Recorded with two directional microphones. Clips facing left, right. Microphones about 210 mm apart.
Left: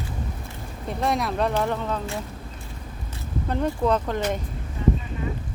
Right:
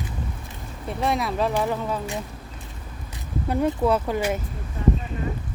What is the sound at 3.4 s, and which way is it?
Speech, 10° right (ahead or behind).